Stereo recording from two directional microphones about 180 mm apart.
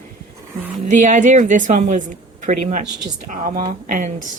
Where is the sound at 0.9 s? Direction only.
45° right (ahead or behind).